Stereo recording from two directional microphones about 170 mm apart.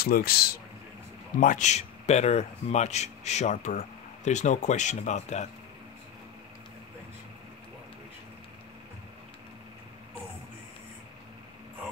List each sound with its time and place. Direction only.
0.0 s speech: 60° left (ahead or behind)
1.4 s speech: 45° left (ahead or behind)